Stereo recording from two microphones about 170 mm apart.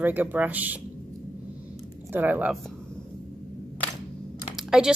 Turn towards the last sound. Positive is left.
turn(degrees=-5)  # may be behind; listen again after turning